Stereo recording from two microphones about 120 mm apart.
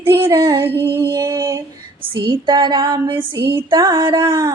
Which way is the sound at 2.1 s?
40° right (ahead or behind).